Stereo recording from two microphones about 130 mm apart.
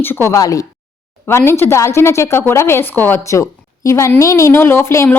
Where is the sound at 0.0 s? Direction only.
20° left (ahead or behind).